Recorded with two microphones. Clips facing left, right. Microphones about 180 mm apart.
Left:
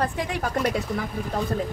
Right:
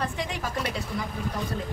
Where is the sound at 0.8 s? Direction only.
60° left (ahead or behind).